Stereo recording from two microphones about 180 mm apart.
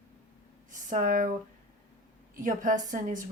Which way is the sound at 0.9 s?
45° right (ahead or behind).